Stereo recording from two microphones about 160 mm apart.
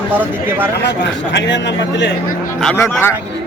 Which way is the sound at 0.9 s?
90° left.